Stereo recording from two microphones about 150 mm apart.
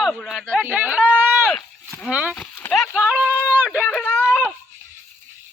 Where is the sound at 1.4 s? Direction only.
5° left (ahead or behind).